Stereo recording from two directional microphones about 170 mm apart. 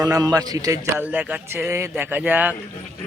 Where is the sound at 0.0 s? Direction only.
20° right (ahead or behind).